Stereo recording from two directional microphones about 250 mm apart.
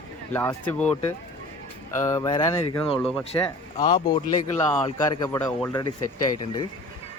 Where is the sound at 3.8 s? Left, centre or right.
Centre.